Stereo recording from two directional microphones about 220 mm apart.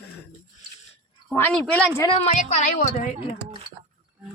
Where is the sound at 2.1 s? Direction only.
30° left (ahead or behind).